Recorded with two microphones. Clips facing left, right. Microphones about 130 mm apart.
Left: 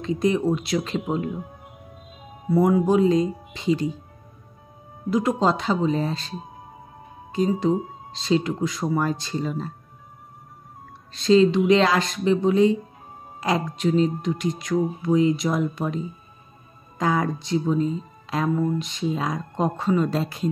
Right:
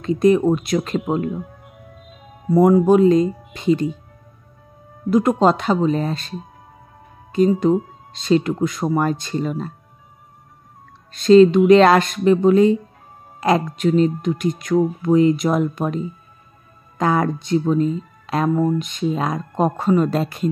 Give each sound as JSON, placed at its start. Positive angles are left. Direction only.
{"t": 0.0, "sound": "speech", "side_deg": -55}
{"t": 2.5, "sound": "speech", "side_deg": -40}
{"t": 2.9, "sound": "speech", "side_deg": -55}
{"t": 5.1, "sound": "speech", "side_deg": -55}
{"t": 7.3, "sound": "speech", "side_deg": -55}
{"t": 11.1, "sound": "speech", "side_deg": -55}
{"t": 17.0, "sound": "speech", "side_deg": -60}
{"t": 18.2, "sound": "music", "side_deg": -60}
{"t": 18.8, "sound": "speech", "side_deg": -55}